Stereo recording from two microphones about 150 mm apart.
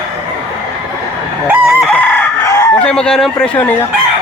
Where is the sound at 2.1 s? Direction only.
20° left (ahead or behind).